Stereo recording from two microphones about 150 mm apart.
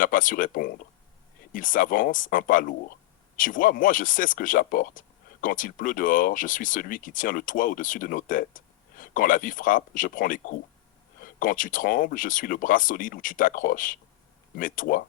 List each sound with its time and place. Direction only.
0.0 s speech: 65° left (ahead or behind)